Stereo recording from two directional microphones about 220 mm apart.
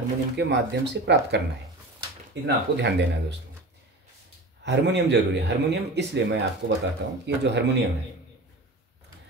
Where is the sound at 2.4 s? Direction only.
50° right (ahead or behind).